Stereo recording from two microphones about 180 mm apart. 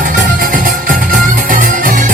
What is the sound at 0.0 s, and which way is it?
Music, 45° right (ahead or behind).